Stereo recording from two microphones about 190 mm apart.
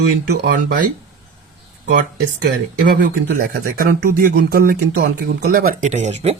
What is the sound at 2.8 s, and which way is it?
Speech, 55° right (ahead or behind).